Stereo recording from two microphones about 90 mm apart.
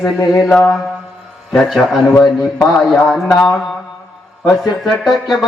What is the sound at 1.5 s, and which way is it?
Speech, 5° left (ahead or behind).